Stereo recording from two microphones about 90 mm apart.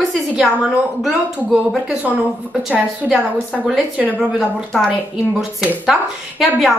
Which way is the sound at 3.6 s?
5° right (ahead or behind).